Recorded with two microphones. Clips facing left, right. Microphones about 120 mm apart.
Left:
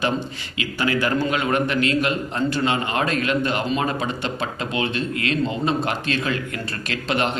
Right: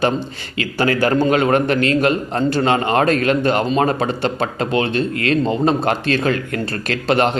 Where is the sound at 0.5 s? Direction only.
40° right (ahead or behind).